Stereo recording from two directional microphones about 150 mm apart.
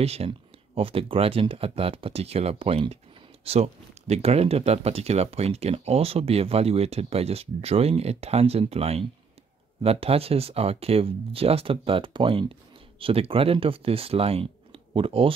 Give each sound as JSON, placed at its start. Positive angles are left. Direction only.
{"t": 0.0, "sound": "speech", "side_deg": -40}